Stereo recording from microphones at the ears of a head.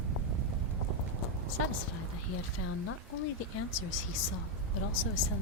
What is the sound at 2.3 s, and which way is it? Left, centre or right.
Speech, left.